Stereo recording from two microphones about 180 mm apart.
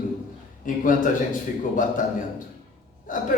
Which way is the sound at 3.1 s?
45° left (ahead or behind).